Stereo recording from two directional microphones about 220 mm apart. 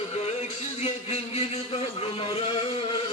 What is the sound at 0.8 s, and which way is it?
Speech, 30° left (ahead or behind).